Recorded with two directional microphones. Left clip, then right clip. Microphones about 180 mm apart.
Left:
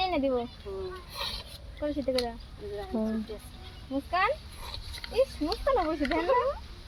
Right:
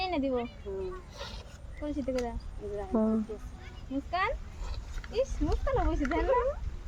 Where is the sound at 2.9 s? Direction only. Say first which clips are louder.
Right 4 dB; 30° right (ahead or behind).